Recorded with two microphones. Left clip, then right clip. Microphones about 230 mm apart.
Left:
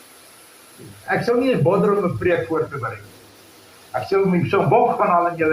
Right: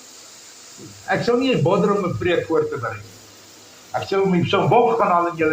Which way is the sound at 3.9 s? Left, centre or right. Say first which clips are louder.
Left 1 dB; right.